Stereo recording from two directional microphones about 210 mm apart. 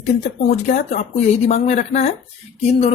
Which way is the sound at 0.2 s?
35° left (ahead or behind).